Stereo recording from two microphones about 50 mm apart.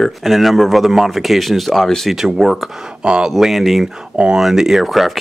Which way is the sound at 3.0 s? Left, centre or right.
Centre.